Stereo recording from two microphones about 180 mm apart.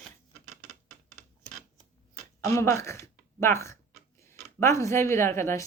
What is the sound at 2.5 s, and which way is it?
Speech, 15° left (ahead or behind).